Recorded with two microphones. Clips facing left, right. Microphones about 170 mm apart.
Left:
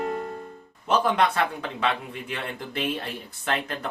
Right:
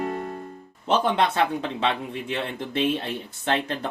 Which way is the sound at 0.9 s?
25° right (ahead or behind).